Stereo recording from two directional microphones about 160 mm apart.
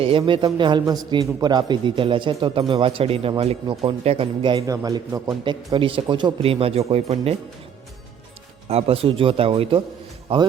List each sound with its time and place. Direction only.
0.0 s a man's voice: 35° right (ahead or behind)
4.6 s speech: 20° right (ahead or behind); by 7.3 s 40° right (ahead or behind)
8.7 s speech: 35° right (ahead or behind)